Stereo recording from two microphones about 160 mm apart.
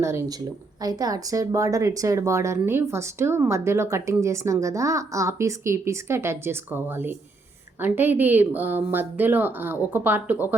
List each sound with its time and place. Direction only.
0.0 s speech: 15° right (ahead or behind)